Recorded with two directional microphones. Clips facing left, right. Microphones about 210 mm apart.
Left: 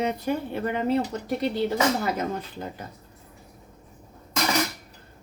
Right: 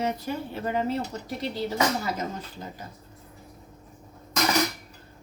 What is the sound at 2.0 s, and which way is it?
Speech, 60° left (ahead or behind).